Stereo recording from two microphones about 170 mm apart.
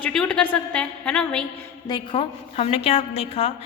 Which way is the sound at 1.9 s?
25° left (ahead or behind).